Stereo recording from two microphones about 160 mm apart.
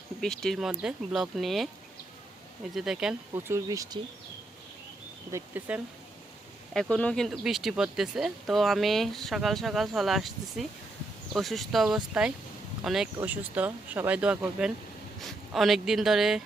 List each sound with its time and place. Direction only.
0.2 s speech: 5° left (ahead or behind)
2.7 s speech: 5° right (ahead or behind)
3.3 s speech: 15° right (ahead or behind)
5.3 s speech: 10° right (ahead or behind)
6.7 s speech: 5° left (ahead or behind)